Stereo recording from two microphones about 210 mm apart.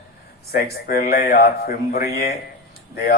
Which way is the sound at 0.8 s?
45° left (ahead or behind).